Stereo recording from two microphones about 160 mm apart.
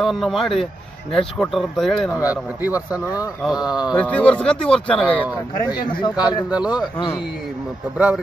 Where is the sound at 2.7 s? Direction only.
10° right (ahead or behind).